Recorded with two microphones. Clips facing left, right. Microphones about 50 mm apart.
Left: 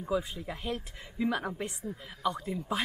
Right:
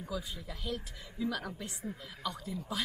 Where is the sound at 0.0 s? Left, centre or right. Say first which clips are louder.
Left 8 dB; left.